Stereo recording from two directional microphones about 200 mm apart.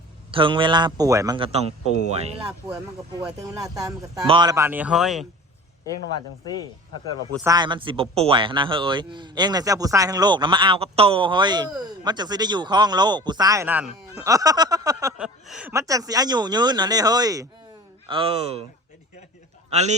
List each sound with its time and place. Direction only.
0.3 s a man's voice: 25° right (ahead or behind)
1.4 s speech: 30° right (ahead or behind)
3.8 s speech: 20° right (ahead or behind); by 5.2 s centre (ahead or behind)
7.3 s a man's voice: 20° right (ahead or behind)
14.2 s a sound: 15° right (ahead or behind)
15.2 s speech: 5° right (ahead or behind)
15.7 s a man's voice: 15° right (ahead or behind)
19.7 s speech: 35° right (ahead or behind)